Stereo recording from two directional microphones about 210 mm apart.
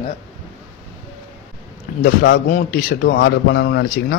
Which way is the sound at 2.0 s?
55° left (ahead or behind).